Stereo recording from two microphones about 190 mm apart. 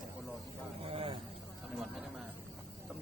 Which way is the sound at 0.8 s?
30° right (ahead or behind).